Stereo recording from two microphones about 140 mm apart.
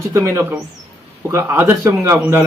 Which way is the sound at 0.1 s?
20° right (ahead or behind).